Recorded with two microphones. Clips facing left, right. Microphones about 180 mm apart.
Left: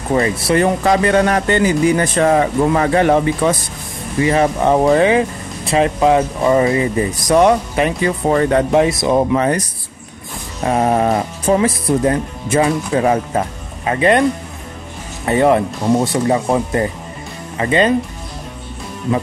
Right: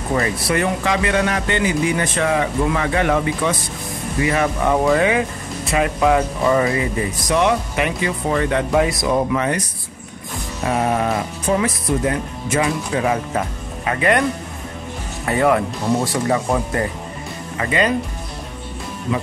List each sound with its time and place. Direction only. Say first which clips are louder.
0.1 s speech: left 5 dB; 25° left (ahead or behind)
0.8 s speech: left 6 dB; 40° left (ahead or behind)
7.2 s speech: left 6 dB; 40° left (ahead or behind)
8.7 s speech: left 2 dB; 25° left (ahead or behind)
10.6 s speech: left 4 dB; 35° left (ahead or behind)
15.2 s speech: left 4 dB; 25° left (ahead or behind)